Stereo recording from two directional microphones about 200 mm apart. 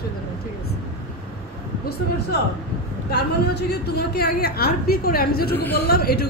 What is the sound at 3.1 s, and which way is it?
A woman's voice, 55° left (ahead or behind).